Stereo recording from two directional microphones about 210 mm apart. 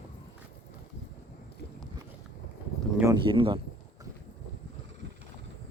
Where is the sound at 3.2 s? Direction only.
25° right (ahead or behind).